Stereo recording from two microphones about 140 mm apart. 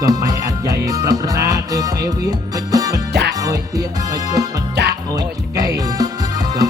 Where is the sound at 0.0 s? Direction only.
25° right (ahead or behind).